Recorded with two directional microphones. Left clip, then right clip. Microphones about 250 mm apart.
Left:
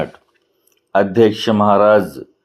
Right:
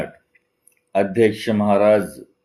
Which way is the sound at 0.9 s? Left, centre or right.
Centre.